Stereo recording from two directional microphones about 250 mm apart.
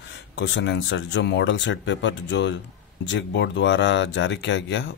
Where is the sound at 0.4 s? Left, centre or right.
Left.